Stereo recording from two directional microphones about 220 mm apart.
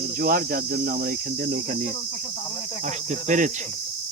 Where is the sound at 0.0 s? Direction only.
40° right (ahead or behind).